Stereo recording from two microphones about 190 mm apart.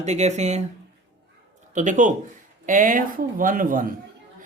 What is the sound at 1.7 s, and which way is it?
Speech, 40° right (ahead or behind).